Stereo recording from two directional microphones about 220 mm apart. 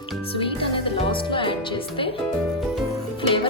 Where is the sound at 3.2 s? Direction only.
25° left (ahead or behind).